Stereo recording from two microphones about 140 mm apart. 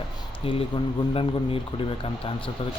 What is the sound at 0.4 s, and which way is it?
Speech, 40° left (ahead or behind).